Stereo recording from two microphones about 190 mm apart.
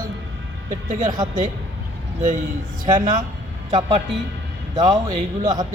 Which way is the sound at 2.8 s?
45° right (ahead or behind).